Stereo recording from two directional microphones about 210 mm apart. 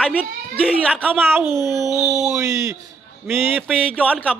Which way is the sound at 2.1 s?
15° right (ahead or behind).